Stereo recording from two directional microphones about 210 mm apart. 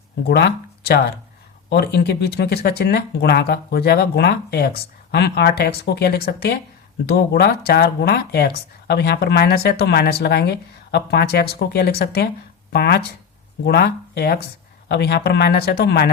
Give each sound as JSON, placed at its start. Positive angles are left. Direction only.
{"t": 0.3, "sound": "speech", "side_deg": 50}